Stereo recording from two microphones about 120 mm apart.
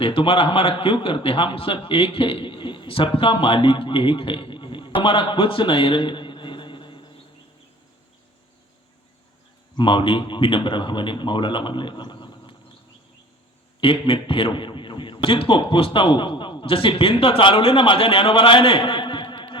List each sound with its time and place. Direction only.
0.0 s a man's voice: 50° left (ahead or behind)
9.7 s a man's voice: 45° left (ahead or behind)
13.8 s a man's voice: 50° left (ahead or behind)